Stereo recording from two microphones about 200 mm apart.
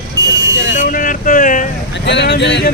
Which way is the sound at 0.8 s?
45° left (ahead or behind).